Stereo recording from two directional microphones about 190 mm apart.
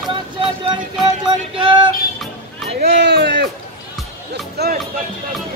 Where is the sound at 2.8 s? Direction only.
65° right (ahead or behind).